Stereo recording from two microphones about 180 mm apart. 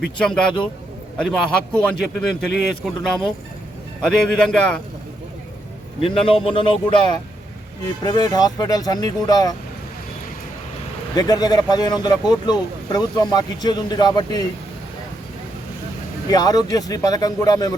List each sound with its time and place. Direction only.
0.2 s speech: 5° left (ahead or behind)
6.0 s speech: 30° left (ahead or behind)
8.0 s speech: 20° left (ahead or behind)
11.1 s speech: 20° left (ahead or behind)
16.3 s speech: 20° left (ahead or behind)